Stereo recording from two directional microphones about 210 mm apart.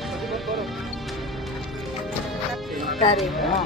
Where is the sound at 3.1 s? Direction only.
Centre (ahead or behind).